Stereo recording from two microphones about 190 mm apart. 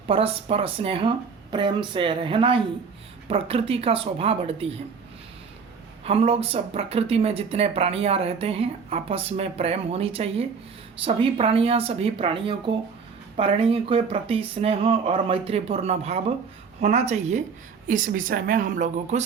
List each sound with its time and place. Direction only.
0.1 s speech: 30° right (ahead or behind)
6.1 s speech: 30° right (ahead or behind)